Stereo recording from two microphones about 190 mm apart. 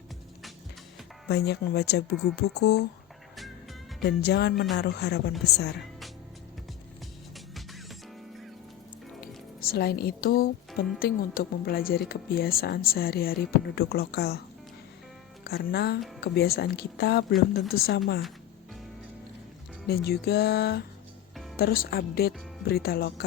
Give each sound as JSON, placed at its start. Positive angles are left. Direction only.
{"t": 1.3, "sound": "speech", "side_deg": 60}
{"t": 3.3, "sound": "music", "side_deg": 0}
{"t": 4.0, "sound": "speech", "side_deg": 60}
{"t": 7.3, "sound": "music", "side_deg": 0}
{"t": 9.2, "sound": "speech", "side_deg": 50}
{"t": 15.4, "sound": "speech", "side_deg": 60}
{"t": 19.9, "sound": "speech", "side_deg": 55}